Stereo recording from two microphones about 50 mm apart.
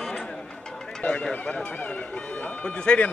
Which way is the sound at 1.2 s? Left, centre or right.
Left.